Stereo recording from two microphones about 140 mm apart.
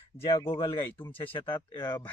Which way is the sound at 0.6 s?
15° left (ahead or behind).